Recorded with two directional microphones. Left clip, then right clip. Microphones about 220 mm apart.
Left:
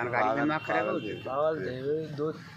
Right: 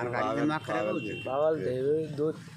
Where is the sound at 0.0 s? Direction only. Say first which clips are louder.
Left 2 dB; 45° right (ahead or behind).